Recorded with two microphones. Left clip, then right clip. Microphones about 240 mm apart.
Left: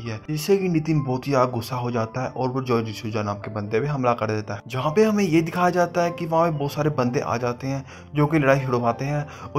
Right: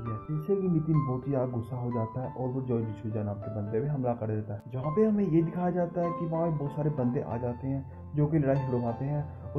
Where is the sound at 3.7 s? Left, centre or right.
Left.